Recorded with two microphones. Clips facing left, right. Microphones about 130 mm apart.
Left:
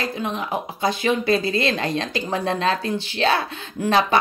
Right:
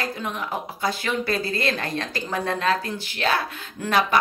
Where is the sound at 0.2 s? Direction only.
20° left (ahead or behind).